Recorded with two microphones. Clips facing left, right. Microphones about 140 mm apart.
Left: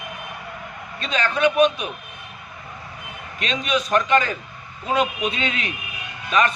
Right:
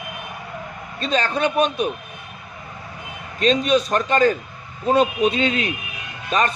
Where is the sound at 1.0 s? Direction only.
35° right (ahead or behind).